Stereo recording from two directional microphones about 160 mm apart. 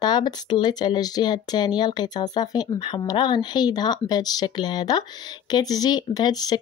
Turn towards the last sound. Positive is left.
turn(degrees=25)  # may be behind; listen again after turning